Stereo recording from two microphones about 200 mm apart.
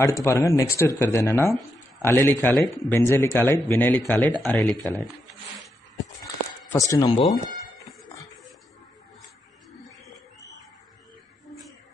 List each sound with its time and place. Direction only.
0.0 s speech: 15° left (ahead or behind)
6.7 s speech: 15° left (ahead or behind)